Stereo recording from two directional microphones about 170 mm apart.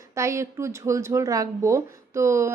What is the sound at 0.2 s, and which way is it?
Speech, 15° right (ahead or behind).